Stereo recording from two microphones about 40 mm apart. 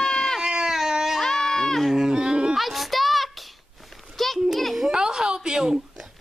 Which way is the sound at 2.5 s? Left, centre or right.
Centre.